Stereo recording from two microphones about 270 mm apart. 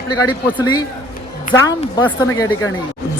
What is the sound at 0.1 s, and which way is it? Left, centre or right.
Speech, centre.